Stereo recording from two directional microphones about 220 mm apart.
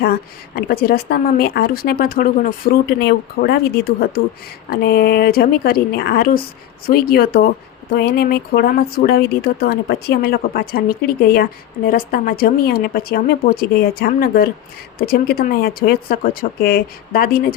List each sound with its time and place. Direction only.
0.0 s speech: 45° left (ahead or behind)